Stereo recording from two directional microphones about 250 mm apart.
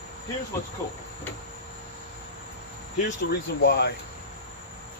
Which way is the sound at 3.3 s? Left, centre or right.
Left.